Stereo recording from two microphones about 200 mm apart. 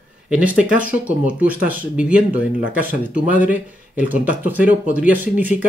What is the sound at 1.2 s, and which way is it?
Speech, 45° right (ahead or behind).